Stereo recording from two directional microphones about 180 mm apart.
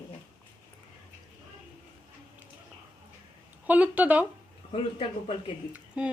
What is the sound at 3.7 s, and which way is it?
Speech, 10° right (ahead or behind).